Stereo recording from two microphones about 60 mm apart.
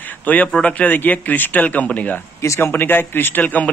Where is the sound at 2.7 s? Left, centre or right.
Left.